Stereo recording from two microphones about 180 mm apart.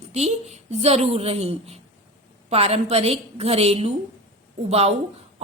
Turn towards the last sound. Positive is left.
turn(degrees=-35)  # may be behind; listen again after turning